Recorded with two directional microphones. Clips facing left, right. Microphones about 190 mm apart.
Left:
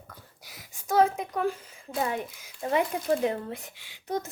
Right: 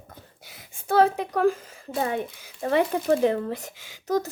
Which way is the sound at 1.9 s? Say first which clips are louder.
Right 3 dB; 30° right (ahead or behind).